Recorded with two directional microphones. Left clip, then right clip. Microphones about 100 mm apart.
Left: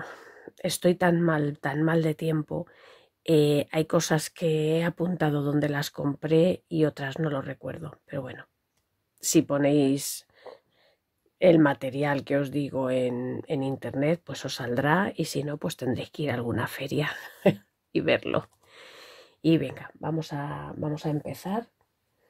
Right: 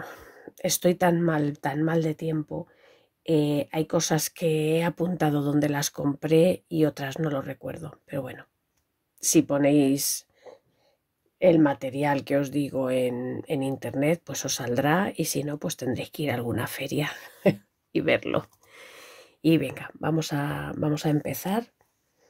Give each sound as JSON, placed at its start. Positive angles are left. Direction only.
{"t": 0.0, "sound": "speech", "side_deg": 20}
{"t": 2.3, "sound": "speech", "side_deg": 75}
{"t": 4.1, "sound": "speech", "side_deg": 25}
{"t": 9.2, "sound": "speech", "side_deg": 25}
{"t": 10.3, "sound": "whispering", "side_deg": 40}
{"t": 11.3, "sound": "speech", "side_deg": 45}
{"t": 12.0, "sound": "speech", "side_deg": 25}
{"t": 19.9, "sound": "speech", "side_deg": -10}
{"t": 21.2, "sound": "speech", "side_deg": -10}